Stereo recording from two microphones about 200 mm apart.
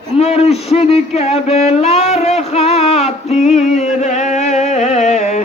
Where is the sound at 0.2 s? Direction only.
30° left (ahead or behind).